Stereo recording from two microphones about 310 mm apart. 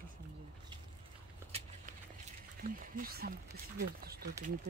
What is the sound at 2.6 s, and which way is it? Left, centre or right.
Speech, right.